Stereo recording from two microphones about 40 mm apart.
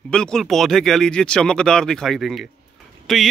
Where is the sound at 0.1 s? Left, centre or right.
Left.